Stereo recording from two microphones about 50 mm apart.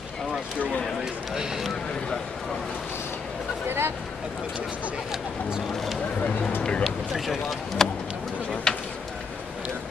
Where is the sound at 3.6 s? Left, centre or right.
Right.